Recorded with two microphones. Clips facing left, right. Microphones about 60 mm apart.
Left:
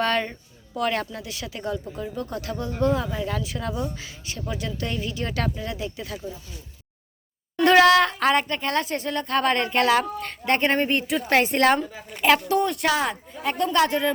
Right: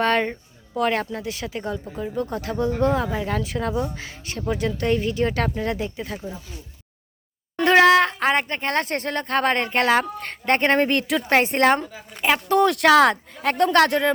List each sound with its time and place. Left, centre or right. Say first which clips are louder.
0.0 s speech: right 3 dB; right
6.0 s speech: right 2 dB; right
7.6 s speech: right 1 dB; right
8.6 s speech: right 1 dB; right
10.8 s speech: right 3 dB; right
11.3 s speech: right 1 dB; right
12.5 s speech: right 7 dB; right